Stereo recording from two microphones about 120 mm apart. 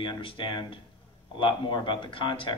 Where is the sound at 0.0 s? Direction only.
45° left (ahead or behind).